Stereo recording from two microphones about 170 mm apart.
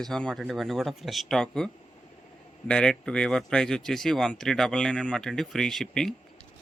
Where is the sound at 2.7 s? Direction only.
5° left (ahead or behind).